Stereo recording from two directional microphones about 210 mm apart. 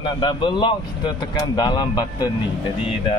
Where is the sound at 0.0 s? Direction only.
25° left (ahead or behind).